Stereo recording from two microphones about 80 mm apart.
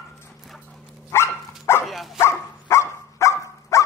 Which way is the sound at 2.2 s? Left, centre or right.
Left.